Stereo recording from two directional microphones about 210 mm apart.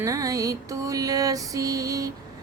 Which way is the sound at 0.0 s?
15° right (ahead or behind).